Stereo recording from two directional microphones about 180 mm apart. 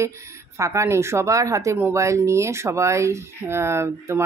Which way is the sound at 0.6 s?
15° right (ahead or behind).